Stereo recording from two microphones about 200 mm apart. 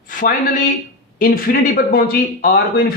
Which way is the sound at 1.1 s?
45° left (ahead or behind).